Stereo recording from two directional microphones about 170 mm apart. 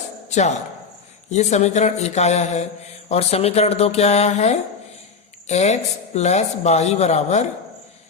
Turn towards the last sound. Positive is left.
turn(degrees=40)  # may be behind; listen again after turning